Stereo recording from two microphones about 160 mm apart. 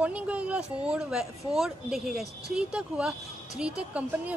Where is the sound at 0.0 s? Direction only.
10° right (ahead or behind).